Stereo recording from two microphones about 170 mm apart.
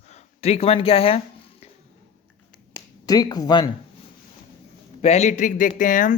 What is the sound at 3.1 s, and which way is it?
Speech, 25° left (ahead or behind).